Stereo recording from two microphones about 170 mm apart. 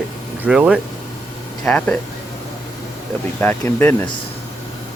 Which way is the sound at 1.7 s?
10° left (ahead or behind).